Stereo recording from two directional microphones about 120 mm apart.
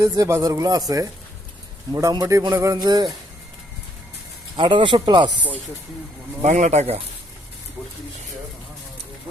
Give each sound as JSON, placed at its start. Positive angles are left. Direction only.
{"t": 0.0, "sound": "speech", "side_deg": -25}
{"t": 2.4, "sound": "a sound", "side_deg": -30}
{"t": 4.5, "sound": "speech", "side_deg": -45}
{"t": 6.4, "sound": "speech", "side_deg": -80}